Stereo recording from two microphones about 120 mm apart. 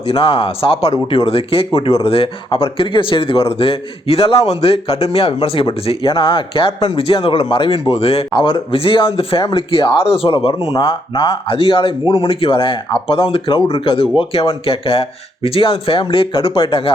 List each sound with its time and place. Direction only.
0.1 s speech: 50° left (ahead or behind)
8.3 s speech: 45° left (ahead or behind)